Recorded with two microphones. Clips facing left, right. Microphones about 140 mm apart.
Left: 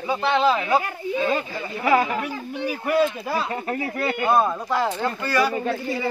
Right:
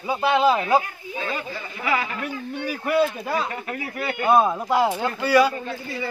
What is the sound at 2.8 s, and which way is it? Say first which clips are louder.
Speech: even; centre (ahead or behind).